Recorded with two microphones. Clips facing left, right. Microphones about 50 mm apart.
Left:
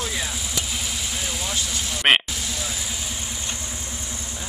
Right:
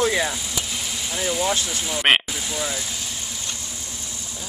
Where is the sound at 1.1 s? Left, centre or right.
Centre.